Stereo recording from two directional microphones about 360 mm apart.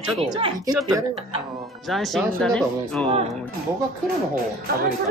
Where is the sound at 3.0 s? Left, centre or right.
Centre.